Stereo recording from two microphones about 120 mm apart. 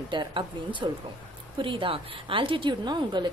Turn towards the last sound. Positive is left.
turn(degrees=-40)  # may be behind; listen again after turning